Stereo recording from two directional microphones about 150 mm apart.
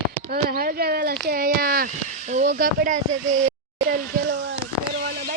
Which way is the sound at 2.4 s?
75° right (ahead or behind).